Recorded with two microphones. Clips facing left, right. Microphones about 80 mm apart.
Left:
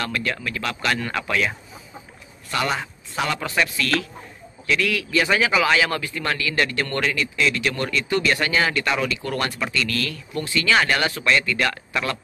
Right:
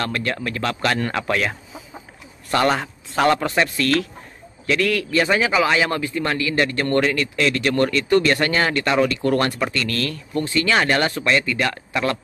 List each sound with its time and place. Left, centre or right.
0.0 s speech: right
2.5 s a man's voice: right
7.2 s speech: right